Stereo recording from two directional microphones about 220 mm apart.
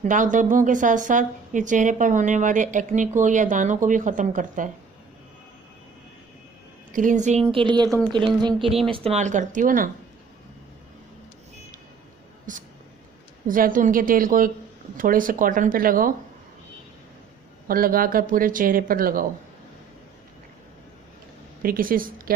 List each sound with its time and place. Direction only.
0.0 s a woman's voice: 35° right (ahead or behind)
6.9 s a woman's voice: 35° right (ahead or behind)
7.4 s a woman's voice: 20° right (ahead or behind)
8.6 s speech: centre (ahead or behind)
8.9 s a woman's voice: 30° right (ahead or behind)
12.5 s a woman's voice: 35° right (ahead or behind)
17.6 s a woman's voice: 40° right (ahead or behind)
21.6 s a woman's voice: 40° right (ahead or behind)